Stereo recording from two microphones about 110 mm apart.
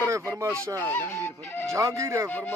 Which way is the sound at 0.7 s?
20° left (ahead or behind).